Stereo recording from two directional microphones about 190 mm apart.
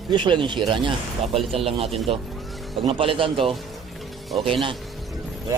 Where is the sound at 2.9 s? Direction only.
30° right (ahead or behind).